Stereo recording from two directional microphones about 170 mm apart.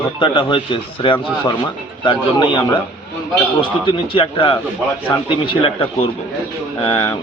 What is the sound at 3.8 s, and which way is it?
A man's voice, 30° left (ahead or behind).